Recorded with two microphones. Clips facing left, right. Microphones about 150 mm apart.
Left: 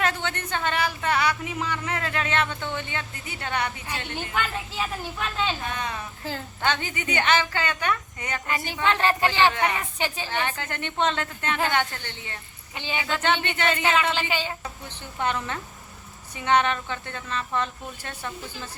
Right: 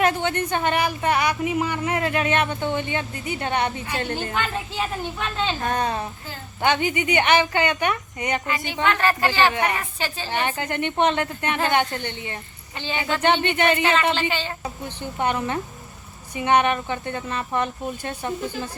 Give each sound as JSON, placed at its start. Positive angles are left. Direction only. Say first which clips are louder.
{"t": 0.0, "sound": "speech", "louder": "right 6 dB", "side_deg": -15}
{"t": 3.9, "sound": "speech", "louder": "right 6 dB", "side_deg": -40}
{"t": 4.4, "sound": "a child's voice", "louder": "left 2 dB", "side_deg": 0}
{"t": 5.5, "sound": "speech", "louder": "right 7 dB", "side_deg": -45}
{"t": 6.6, "sound": "speech", "louder": "right 7 dB", "side_deg": -15}
{"t": 8.8, "sound": "a woman's voice", "louder": "right 2 dB", "side_deg": 25}
{"t": 10.2, "sound": "speech", "louder": "right 4 dB", "side_deg": -15}
{"t": 12.7, "sound": "a woman's voice", "louder": "right 2 dB", "side_deg": 10}
{"t": 13.2, "sound": "speech", "louder": "right 6 dB", "side_deg": -20}
{"t": 14.2, "sound": "a woman's voice", "louder": "right 2 dB", "side_deg": 10}
{"t": 15.2, "sound": "speech", "louder": "right 4 dB", "side_deg": -15}